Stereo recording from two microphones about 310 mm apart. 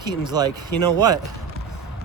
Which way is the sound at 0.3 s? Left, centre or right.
Centre.